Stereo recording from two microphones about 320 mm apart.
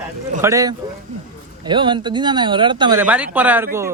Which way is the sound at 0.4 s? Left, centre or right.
Centre.